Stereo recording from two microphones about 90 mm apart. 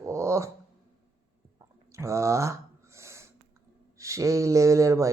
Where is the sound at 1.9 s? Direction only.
35° right (ahead or behind).